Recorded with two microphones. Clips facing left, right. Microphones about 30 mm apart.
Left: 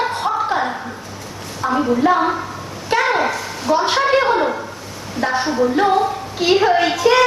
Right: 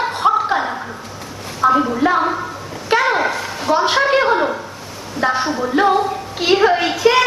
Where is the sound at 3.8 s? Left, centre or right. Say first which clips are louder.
Right 1 dB; centre.